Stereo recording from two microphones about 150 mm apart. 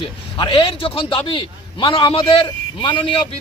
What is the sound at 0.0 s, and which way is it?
A man's voice, 35° left (ahead or behind).